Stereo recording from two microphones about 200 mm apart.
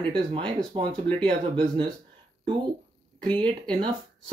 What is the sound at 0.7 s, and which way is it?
Speech, 30° right (ahead or behind).